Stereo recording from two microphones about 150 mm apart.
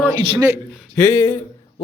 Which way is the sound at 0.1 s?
20° right (ahead or behind).